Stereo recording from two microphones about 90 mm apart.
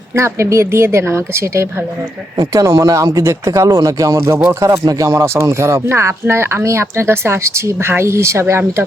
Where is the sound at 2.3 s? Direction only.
40° right (ahead or behind).